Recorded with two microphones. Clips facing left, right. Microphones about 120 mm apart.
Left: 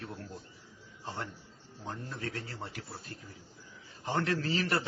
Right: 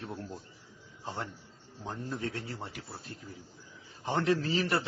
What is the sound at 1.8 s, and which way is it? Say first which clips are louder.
A man's voice: right 3 dB; 20° right (ahead or behind).